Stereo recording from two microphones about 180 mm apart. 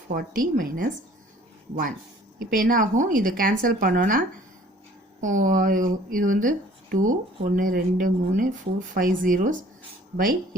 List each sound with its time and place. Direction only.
0.1 s speech: 50° right (ahead or behind)
2.4 s speech: 50° right (ahead or behind)
5.2 s speech: 45° right (ahead or behind)